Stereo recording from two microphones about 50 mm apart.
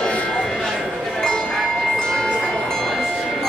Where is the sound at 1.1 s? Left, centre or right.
Centre.